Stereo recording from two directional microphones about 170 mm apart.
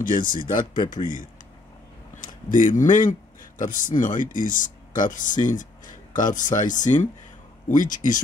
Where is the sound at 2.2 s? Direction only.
50° left (ahead or behind).